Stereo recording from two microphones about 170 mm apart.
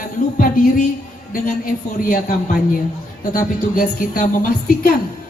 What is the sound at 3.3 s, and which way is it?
Music, 55° left (ahead or behind).